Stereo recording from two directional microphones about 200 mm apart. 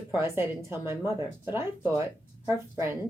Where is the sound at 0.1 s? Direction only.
10° right (ahead or behind).